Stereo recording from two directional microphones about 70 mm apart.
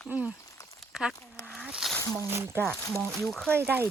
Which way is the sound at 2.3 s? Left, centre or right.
Right.